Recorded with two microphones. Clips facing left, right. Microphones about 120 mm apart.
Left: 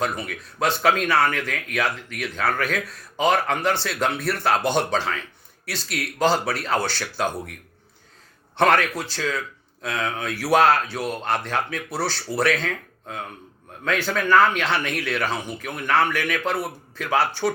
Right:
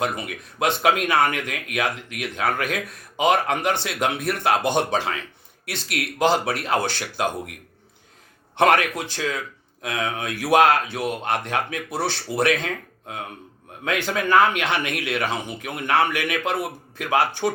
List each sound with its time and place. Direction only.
0.0 s speech: 15° right (ahead or behind)
8.5 s speech: 15° right (ahead or behind)